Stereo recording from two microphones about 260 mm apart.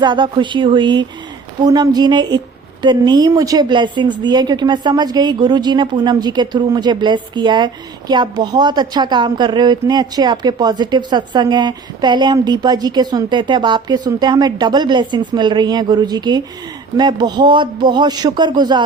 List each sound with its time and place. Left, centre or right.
0.0 s a woman's voice: centre